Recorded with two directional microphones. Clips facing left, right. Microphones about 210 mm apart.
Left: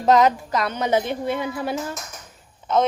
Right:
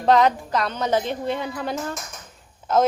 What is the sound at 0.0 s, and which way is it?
A woman's voice, 5° left (ahead or behind).